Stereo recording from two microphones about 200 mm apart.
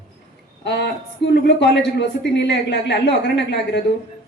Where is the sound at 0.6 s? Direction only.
60° left (ahead or behind).